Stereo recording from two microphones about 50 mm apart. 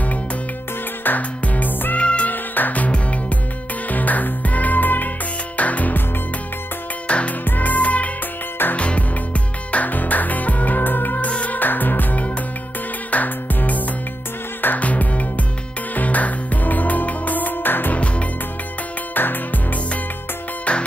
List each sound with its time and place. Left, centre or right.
1.0 s music: left
2.0 s music: left
2.3 s music: left
7.1 s music: left
17.9 s music: left
19.1 s music: left